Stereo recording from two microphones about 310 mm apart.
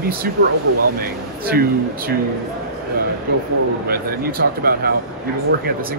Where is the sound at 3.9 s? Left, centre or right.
Right.